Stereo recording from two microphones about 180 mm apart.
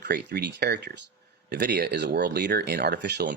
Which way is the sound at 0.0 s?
65° right (ahead or behind).